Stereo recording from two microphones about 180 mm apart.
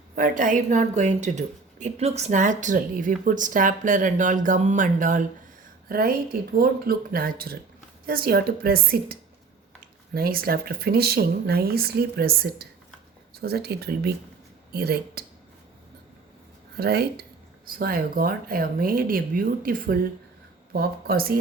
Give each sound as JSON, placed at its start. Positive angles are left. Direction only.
{"t": 0.2, "sound": "a woman's voice", "side_deg": -45}
{"t": 10.2, "sound": "speech", "side_deg": -55}
{"t": 16.7, "sound": "a woman's voice", "side_deg": -60}